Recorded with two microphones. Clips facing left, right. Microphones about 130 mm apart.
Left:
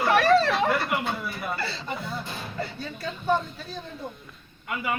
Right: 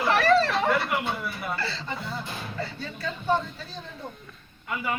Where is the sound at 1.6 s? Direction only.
10° left (ahead or behind).